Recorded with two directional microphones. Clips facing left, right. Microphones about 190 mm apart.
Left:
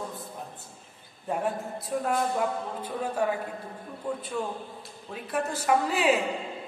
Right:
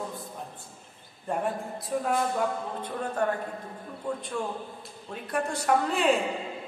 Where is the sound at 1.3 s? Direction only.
Centre (ahead or behind).